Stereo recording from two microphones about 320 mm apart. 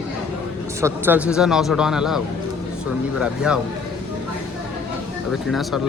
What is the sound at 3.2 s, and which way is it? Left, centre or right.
Speech, centre.